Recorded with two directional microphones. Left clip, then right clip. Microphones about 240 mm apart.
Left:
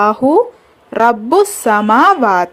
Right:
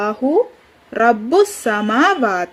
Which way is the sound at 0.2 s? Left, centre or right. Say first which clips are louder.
Left 6 dB; left.